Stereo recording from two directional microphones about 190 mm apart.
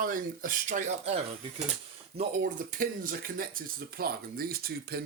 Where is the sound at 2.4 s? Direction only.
45° right (ahead or behind).